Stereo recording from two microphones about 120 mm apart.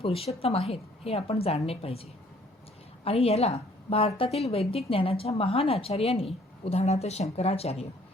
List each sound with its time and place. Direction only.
0.0 s a woman's voice: 55° left (ahead or behind)